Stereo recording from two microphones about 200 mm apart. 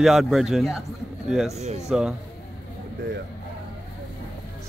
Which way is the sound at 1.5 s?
35° right (ahead or behind).